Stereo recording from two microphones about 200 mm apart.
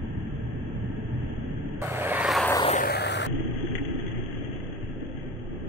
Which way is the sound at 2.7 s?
50° left (ahead or behind).